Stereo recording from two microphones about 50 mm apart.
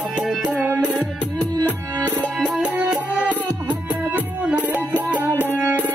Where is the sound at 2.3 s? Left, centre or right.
Centre.